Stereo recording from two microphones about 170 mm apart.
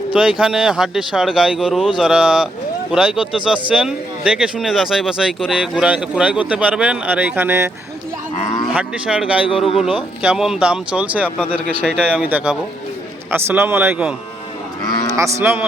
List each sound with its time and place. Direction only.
0.1 s speech: 5° right (ahead or behind)
8.7 s speech: 5° right (ahead or behind)
11.9 s speech: 5° left (ahead or behind)
12.2 s speech: 10° right (ahead or behind)
15.1 s speech: 15° right (ahead or behind)